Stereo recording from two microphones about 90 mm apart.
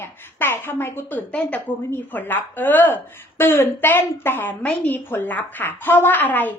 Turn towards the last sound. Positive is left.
turn(degrees=20)  # may be behind; listen again after turning